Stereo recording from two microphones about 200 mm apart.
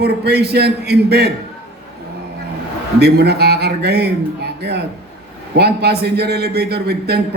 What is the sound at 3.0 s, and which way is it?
A man's voice, 55° right (ahead or behind).